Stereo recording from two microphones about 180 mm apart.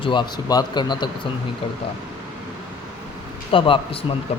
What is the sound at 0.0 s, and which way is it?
Speech, 25° left (ahead or behind).